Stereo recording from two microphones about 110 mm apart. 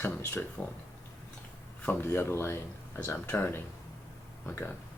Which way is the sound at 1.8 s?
20° left (ahead or behind).